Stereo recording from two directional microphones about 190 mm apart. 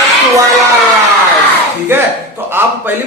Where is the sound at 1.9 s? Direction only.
10° right (ahead or behind).